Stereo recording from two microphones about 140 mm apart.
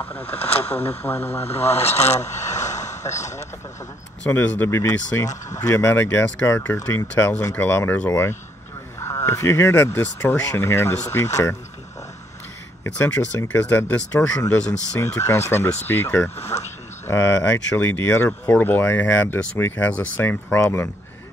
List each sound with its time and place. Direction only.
0.0 s speech: 15° left (ahead or behind)
0.4 s speech: 45° left (ahead or behind)
1.0 s speech: 15° left (ahead or behind)
1.4 s speech: 50° left (ahead or behind)
2.2 s vehicle: 55° left (ahead or behind)
2.9 s a sound: 20° left (ahead or behind)
4.2 s speech: 10° left (ahead or behind)
12.8 s speech: 15° left (ahead or behind)